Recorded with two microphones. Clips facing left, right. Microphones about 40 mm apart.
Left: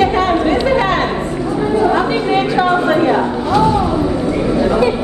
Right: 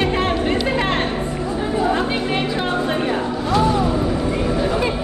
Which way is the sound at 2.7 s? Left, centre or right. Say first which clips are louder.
Left 8 dB; left.